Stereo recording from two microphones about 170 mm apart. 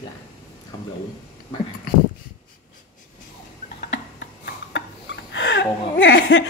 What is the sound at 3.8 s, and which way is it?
Tick-tock, 90° left.